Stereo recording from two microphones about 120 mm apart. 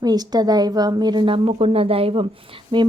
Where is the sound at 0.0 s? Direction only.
35° right (ahead or behind).